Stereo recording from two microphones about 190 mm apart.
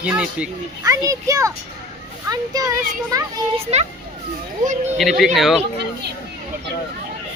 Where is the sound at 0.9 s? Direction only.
15° right (ahead or behind).